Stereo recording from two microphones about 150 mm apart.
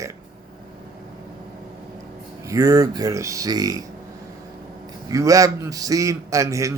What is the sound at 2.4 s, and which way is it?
A man's voice, 20° right (ahead or behind).